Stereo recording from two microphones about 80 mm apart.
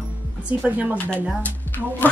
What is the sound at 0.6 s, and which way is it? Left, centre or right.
Speech, centre.